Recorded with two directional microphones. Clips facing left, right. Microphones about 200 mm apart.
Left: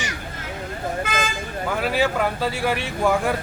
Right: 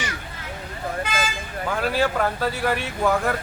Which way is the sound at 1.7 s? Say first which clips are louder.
Left 1 dB; 10° left (ahead or behind).